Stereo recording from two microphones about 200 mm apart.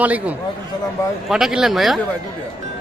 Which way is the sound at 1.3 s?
5° right (ahead or behind).